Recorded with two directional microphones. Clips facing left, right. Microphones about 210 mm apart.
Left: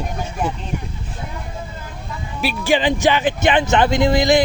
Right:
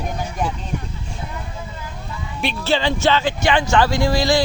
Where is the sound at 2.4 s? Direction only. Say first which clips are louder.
Left 2 dB; 10° left (ahead or behind).